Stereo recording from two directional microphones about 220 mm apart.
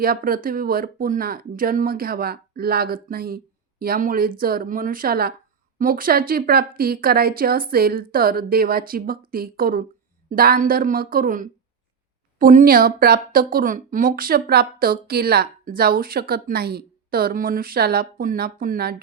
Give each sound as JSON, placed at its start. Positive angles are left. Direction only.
{"t": 0.0, "sound": "a woman's voice", "side_deg": -40}